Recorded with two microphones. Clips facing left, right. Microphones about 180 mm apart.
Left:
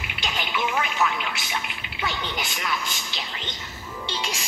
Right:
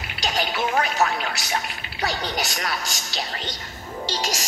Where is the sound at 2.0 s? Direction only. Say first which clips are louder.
Right 4 dB; 40° right (ahead or behind).